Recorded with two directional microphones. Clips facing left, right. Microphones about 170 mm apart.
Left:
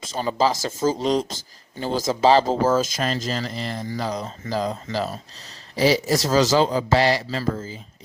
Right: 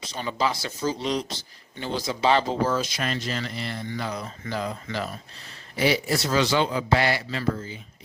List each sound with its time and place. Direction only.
0.0 s speech: 40° left (ahead or behind)